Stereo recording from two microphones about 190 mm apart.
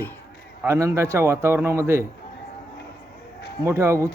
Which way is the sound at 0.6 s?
15° right (ahead or behind).